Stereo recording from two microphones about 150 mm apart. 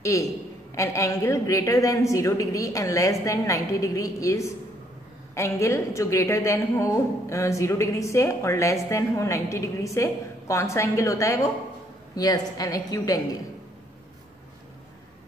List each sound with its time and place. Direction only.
0.0 s a man's voice: 20° left (ahead or behind)